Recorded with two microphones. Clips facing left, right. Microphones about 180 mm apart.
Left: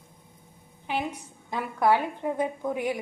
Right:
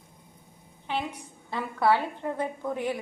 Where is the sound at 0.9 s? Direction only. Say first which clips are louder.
Left 1 dB; 10° left (ahead or behind).